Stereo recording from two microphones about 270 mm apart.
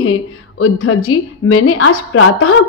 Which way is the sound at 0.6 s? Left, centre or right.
Left.